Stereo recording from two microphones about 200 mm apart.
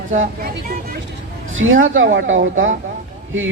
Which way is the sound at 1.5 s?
75° right (ahead or behind).